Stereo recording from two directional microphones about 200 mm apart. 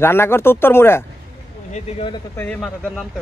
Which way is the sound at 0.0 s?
10° left (ahead or behind).